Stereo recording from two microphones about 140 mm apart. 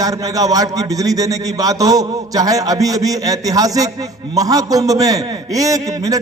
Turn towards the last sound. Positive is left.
turn(degrees=-25)  # may be behind; listen again after turning